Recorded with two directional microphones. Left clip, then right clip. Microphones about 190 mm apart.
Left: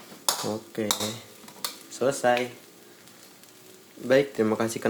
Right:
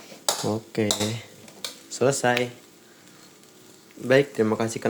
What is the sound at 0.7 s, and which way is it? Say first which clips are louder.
Speech: right 6 dB; 30° right (ahead or behind).